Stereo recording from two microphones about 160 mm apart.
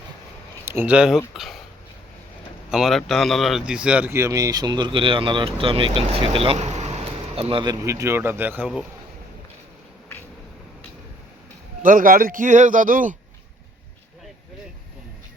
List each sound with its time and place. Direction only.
0.6 s speech: 15° right (ahead or behind)
2.6 s speech: centre (ahead or behind)
11.8 s speech: 60° right (ahead or behind)